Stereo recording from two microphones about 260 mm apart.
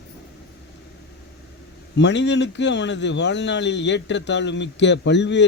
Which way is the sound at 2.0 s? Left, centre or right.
Left.